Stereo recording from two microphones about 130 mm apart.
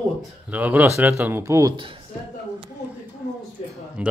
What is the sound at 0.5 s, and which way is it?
Speech, 10° right (ahead or behind).